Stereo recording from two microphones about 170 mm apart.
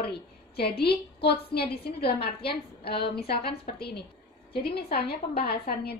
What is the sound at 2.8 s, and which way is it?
A woman's voice, 70° left (ahead or behind).